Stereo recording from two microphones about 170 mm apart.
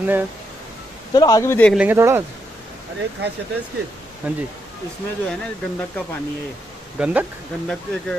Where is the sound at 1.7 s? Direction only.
10° right (ahead or behind).